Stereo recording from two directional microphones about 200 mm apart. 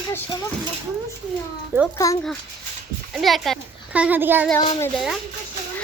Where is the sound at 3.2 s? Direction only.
Centre (ahead or behind).